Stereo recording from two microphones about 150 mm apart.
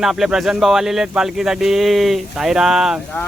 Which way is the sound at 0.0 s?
5° right (ahead or behind).